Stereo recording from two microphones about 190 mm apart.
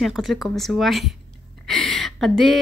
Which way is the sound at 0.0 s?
Centre (ahead or behind).